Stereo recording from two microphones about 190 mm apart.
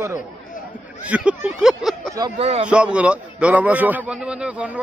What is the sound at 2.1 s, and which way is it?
Speech, 20° right (ahead or behind).